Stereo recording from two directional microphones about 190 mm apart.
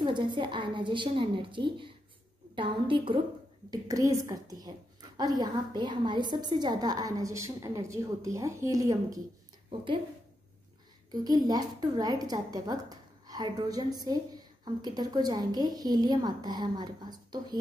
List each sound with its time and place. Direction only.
0.0 s a woman's voice: 25° right (ahead or behind)
11.2 s a woman's voice: 20° right (ahead or behind)